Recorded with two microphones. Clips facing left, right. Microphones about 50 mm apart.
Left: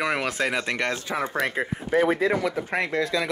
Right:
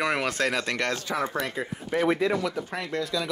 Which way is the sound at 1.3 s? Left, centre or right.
Left.